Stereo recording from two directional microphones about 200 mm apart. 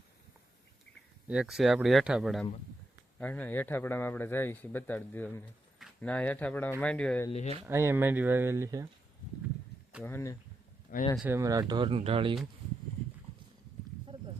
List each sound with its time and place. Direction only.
1.3 s speech: 5° right (ahead or behind)
7.3 s speech: 30° left (ahead or behind)
7.6 s speech: 15° right (ahead or behind)
10.0 s speech: 10° left (ahead or behind)
11.2 s speech: 10° right (ahead or behind)